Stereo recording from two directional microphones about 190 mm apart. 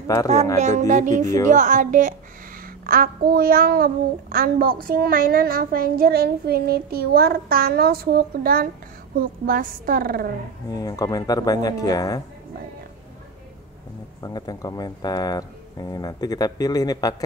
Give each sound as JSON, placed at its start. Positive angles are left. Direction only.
{"t": 0.0, "sound": "speech", "side_deg": 15}
{"t": 0.6, "sound": "a sound", "side_deg": -40}
{"t": 2.9, "sound": "a child's voice", "side_deg": -50}
{"t": 10.7, "sound": "speech", "side_deg": 20}
{"t": 14.2, "sound": "speech", "side_deg": 20}